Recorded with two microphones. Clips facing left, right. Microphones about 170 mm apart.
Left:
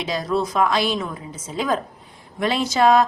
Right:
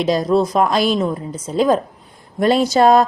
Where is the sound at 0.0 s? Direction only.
40° right (ahead or behind).